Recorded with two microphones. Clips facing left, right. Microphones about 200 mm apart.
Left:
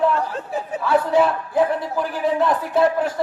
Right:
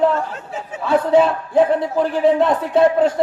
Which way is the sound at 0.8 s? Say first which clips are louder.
Right 3 dB; 25° right (ahead or behind).